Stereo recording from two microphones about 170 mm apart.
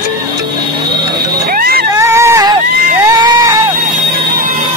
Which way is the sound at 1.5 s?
60° right (ahead or behind).